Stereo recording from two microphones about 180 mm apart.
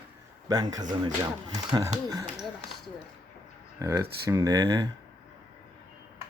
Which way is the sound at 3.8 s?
15° right (ahead or behind).